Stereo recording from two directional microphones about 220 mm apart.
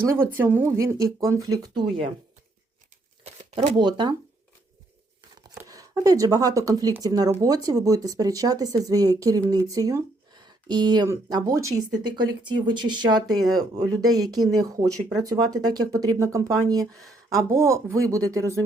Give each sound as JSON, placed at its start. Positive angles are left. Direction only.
{"t": 0.1, "sound": "speech", "side_deg": -10}
{"t": 3.2, "sound": "speech", "side_deg": -20}
{"t": 5.4, "sound": "speech", "side_deg": -15}